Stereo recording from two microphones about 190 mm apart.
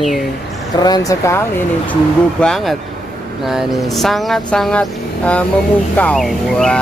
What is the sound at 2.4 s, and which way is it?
Speech, centre (ahead or behind).